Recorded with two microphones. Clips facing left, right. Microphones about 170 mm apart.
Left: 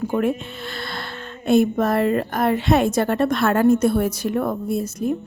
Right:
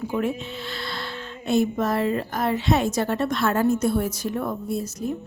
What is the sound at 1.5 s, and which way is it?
A woman's voice, 55° left (ahead or behind).